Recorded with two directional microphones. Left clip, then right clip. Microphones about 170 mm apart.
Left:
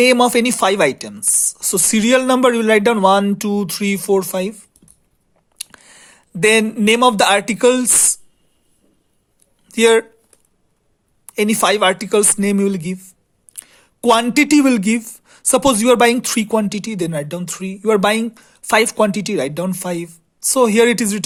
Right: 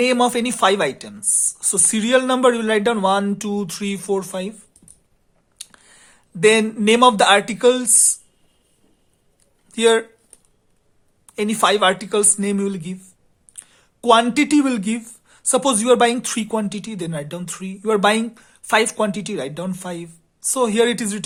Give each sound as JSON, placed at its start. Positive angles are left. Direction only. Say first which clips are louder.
{"t": 0.0, "sound": "speech", "louder": "left 5 dB", "side_deg": 35}
{"t": 9.6, "sound": "speech", "louder": "left 4 dB", "side_deg": 40}
{"t": 11.3, "sound": "speech", "louder": "left 2 dB", "side_deg": 35}